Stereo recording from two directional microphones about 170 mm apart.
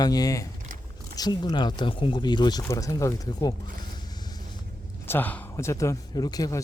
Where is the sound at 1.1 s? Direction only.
25° left (ahead or behind).